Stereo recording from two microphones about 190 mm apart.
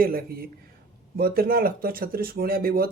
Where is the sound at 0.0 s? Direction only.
50° right (ahead or behind).